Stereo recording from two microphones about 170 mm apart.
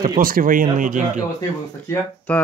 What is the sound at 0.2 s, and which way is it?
Speech, 55° right (ahead or behind).